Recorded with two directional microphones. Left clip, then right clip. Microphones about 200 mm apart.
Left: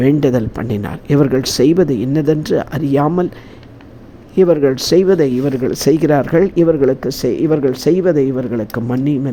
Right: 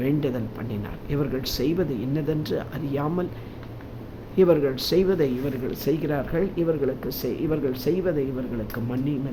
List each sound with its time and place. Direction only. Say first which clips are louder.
0.0 s speech: left 12 dB; 35° left (ahead or behind)
4.4 s speech: left 8 dB; 35° left (ahead or behind)